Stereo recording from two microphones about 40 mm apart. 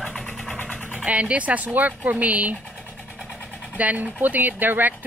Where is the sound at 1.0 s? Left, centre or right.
Right.